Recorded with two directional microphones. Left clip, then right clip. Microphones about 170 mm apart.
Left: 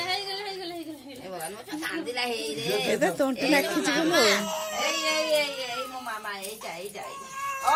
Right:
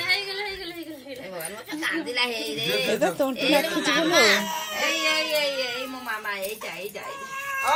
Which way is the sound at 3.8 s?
20° left (ahead or behind).